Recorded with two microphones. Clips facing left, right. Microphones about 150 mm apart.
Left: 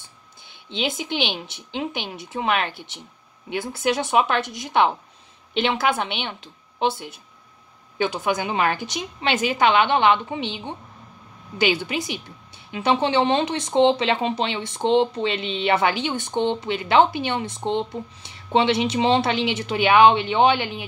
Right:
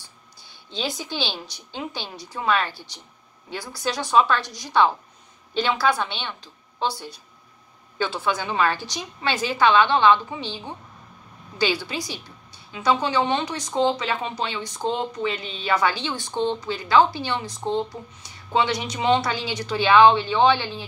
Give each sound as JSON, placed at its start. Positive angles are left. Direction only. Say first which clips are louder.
{"t": 0.7, "sound": "a woman's voice", "louder": "left 3 dB", "side_deg": 20}